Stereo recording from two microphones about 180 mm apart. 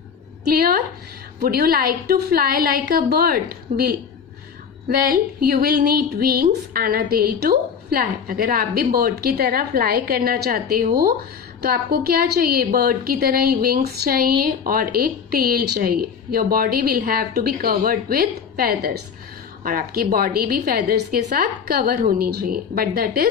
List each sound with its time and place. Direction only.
0.5 s speech: 55° right (ahead or behind)